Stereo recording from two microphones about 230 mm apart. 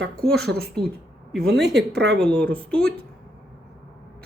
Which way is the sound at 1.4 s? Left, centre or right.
Right.